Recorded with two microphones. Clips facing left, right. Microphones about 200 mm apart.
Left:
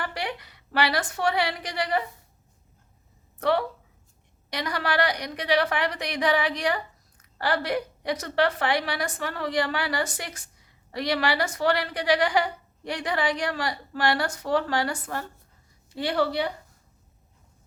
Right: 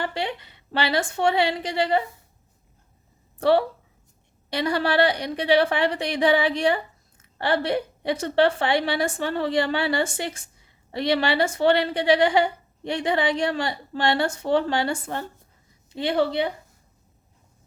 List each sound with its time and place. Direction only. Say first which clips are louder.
0.0 s a woman's voice: right 4 dB; 25° right (ahead or behind)
3.3 s a woman's voice: right 5 dB; 30° right (ahead or behind)